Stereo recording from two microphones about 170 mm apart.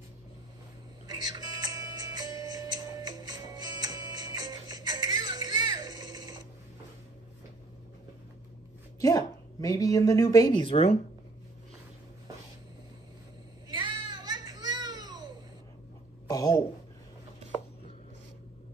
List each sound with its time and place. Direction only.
1.0 s music: 25° right (ahead or behind)
9.0 s speech: 20° left (ahead or behind)
13.7 s a sound: 30° right (ahead or behind)
16.3 s speech: 20° left (ahead or behind)